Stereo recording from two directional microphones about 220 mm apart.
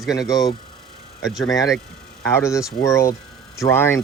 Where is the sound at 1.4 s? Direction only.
15° left (ahead or behind).